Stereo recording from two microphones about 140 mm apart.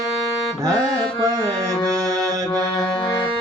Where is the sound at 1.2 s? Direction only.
25° right (ahead or behind).